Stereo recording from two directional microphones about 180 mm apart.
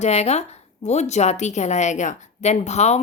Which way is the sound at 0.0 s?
40° left (ahead or behind).